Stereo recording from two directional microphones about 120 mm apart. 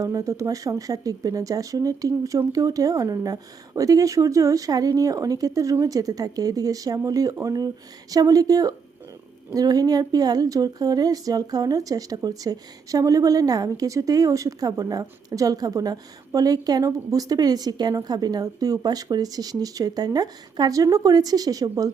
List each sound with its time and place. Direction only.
0.0 s a woman's voice: 30° right (ahead or behind)